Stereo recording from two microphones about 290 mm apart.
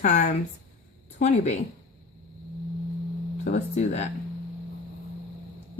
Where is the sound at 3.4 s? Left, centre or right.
Left.